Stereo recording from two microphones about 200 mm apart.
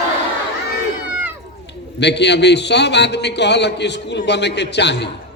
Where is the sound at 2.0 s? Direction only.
60° left (ahead or behind).